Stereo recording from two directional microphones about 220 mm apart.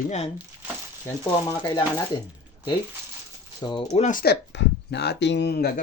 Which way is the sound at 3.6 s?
20° left (ahead or behind).